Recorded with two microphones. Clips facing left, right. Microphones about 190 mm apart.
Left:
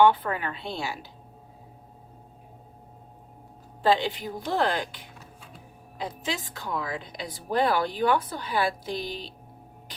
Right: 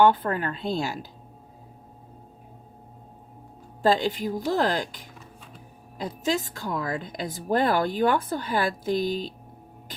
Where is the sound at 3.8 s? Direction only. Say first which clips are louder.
Right 2 dB; 45° right (ahead or behind).